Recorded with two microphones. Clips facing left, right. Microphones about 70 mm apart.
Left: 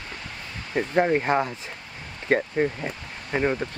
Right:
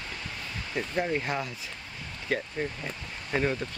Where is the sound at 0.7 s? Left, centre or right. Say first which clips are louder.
Left 8 dB; left.